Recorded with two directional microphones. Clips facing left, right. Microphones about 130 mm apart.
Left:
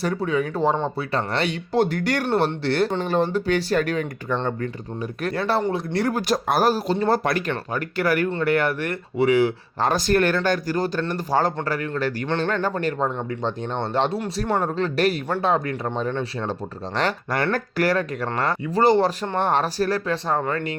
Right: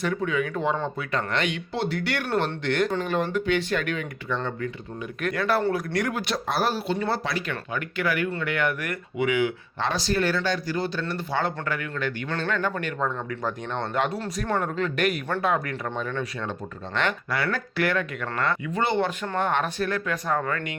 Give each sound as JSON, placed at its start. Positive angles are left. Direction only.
{"t": 0.0, "sound": "speech", "side_deg": 35}
{"t": 2.2, "sound": "speech", "side_deg": 30}
{"t": 5.2, "sound": "speech", "side_deg": 30}
{"t": 7.3, "sound": "speech", "side_deg": 55}
{"t": 7.5, "sound": "speech", "side_deg": 40}